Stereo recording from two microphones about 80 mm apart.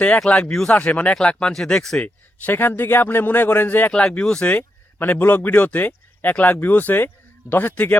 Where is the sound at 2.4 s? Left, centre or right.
Left.